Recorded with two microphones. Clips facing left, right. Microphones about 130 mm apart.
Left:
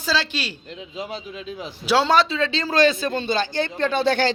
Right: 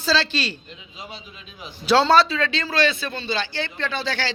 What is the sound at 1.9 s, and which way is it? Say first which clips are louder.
Speech: right 2 dB; 15° left (ahead or behind).